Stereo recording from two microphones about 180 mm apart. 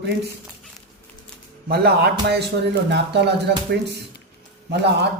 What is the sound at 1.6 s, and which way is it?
Speech, 60° right (ahead or behind).